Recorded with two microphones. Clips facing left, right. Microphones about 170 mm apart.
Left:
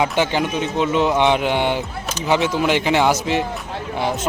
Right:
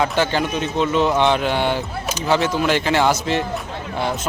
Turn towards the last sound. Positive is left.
turn(degrees=15)  # may be behind; listen again after turning